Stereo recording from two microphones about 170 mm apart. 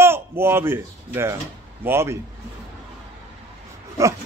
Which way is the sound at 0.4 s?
15° right (ahead or behind).